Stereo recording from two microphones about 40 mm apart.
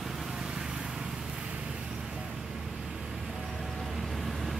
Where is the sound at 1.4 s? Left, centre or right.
Right; by 4.5 s centre.